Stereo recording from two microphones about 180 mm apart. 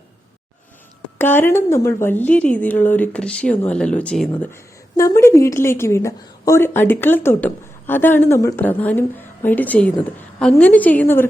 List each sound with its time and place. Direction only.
1.2 s a woman's voice: 10° left (ahead or behind)
4.4 s a woman's voice: 15° left (ahead or behind)